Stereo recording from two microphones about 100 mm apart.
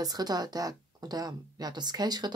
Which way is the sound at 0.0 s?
40° right (ahead or behind).